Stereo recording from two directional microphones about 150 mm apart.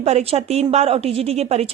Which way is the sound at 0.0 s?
45° right (ahead or behind).